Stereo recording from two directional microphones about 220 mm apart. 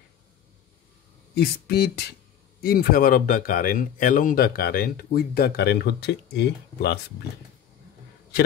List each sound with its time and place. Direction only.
1.3 s speech: 45° left (ahead or behind)